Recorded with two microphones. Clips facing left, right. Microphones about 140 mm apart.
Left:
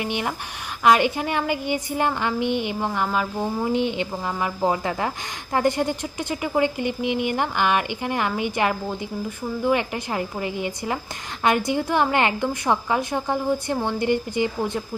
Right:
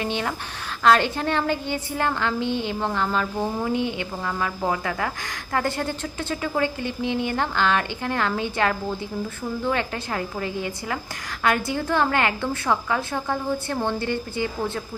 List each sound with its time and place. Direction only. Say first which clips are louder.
0.0 s speech: even; 15° left (ahead or behind)